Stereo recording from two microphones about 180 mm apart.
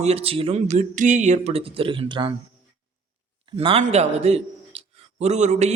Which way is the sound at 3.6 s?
30° right (ahead or behind).